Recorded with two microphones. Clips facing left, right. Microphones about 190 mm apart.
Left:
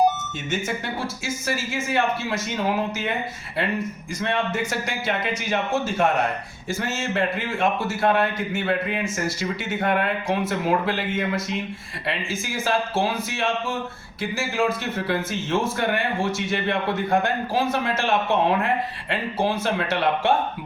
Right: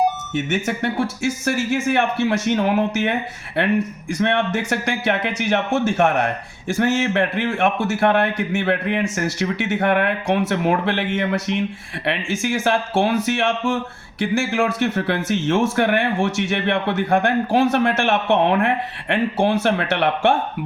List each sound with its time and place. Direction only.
0.3 s a man's voice: 70° right (ahead or behind)
4.1 s a man's voice: 75° right (ahead or behind)